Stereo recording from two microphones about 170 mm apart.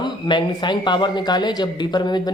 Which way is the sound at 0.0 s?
25° left (ahead or behind).